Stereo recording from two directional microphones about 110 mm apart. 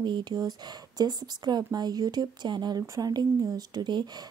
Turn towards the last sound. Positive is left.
turn(degrees=-40)  # may be behind; listen again after turning